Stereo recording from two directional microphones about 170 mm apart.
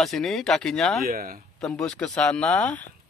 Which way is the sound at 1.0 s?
60° right (ahead or behind).